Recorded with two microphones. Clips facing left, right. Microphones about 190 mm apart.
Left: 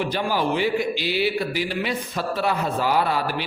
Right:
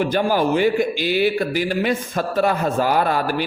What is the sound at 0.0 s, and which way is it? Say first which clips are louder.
A man's voice: right 5 dB; 45° right (ahead or behind).